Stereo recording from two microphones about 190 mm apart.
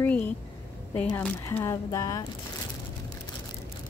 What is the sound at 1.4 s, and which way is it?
Speech, 15° left (ahead or behind).